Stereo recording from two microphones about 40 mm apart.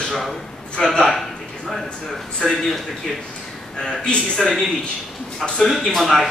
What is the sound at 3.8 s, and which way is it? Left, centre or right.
A man's voice, left.